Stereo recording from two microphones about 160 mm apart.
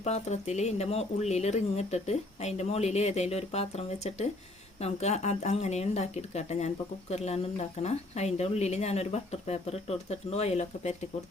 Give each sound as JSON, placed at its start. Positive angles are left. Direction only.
{"t": 0.0, "sound": "speech", "side_deg": 45}